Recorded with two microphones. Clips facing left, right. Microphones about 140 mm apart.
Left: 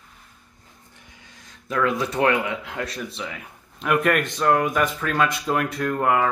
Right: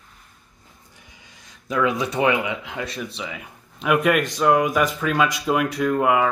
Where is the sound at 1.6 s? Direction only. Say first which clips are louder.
Right 1 dB; 10° right (ahead or behind).